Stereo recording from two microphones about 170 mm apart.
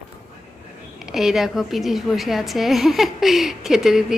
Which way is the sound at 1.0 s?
Centre (ahead or behind).